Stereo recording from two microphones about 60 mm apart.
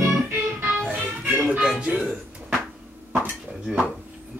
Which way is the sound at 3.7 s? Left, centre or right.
Centre.